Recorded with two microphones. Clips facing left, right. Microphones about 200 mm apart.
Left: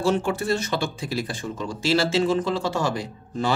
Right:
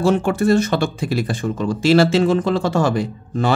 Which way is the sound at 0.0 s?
55° right (ahead or behind).